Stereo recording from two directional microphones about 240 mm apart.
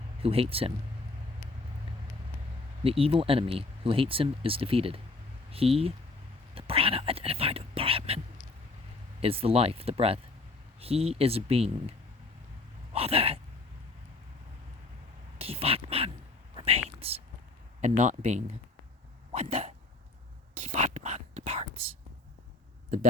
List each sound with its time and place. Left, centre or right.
0.2 s speech: right
2.8 s speech: right
6.5 s whispering: right
9.2 s speech: right
12.9 s a sound: right
15.4 s a sound: right
16.6 s whispering: right
17.7 s speech: right
19.3 s hiccup: right
20.6 s whispering: right